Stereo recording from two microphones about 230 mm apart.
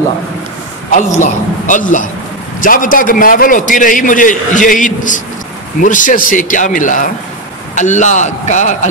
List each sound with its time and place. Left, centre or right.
1.2 s a man's voice: left